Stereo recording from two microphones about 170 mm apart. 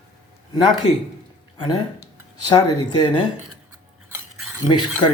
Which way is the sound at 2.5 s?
25° left (ahead or behind).